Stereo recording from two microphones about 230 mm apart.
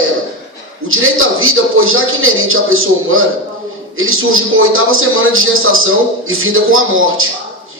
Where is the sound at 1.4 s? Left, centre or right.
Right.